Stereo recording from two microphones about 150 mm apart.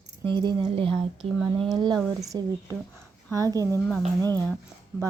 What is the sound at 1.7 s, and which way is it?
Speech, 30° right (ahead or behind).